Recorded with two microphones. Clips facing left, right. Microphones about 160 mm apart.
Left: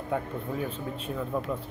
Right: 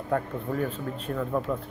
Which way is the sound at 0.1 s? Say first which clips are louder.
Right 3 dB; 5° left (ahead or behind).